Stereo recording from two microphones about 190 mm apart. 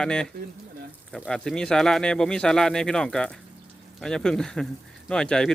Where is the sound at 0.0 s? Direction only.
5° left (ahead or behind).